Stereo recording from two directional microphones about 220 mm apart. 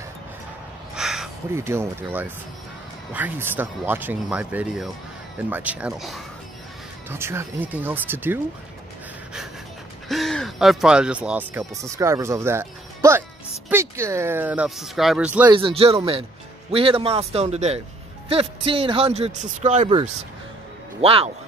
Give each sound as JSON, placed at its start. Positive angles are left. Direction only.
{"t": 0.9, "sound": "speech", "side_deg": 0}
{"t": 7.1, "sound": "speech", "side_deg": -10}
{"t": 10.0, "sound": "speech", "side_deg": 0}
{"t": 15.5, "sound": "speech", "side_deg": -25}